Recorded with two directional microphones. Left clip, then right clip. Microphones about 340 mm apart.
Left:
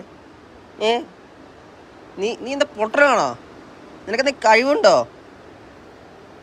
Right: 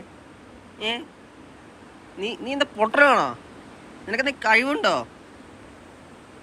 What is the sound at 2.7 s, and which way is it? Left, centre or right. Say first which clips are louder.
Speech: left 1 dB; centre.